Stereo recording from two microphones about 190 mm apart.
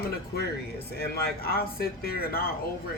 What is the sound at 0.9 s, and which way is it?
Speech, 55° left (ahead or behind).